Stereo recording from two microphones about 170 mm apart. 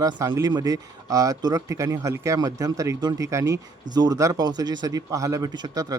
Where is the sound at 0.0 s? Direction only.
25° right (ahead or behind).